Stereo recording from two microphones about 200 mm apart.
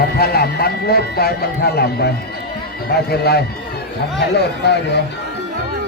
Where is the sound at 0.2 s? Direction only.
50° left (ahead or behind).